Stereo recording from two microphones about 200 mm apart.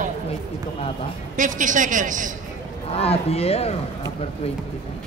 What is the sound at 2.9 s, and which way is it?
Speech, 30° left (ahead or behind).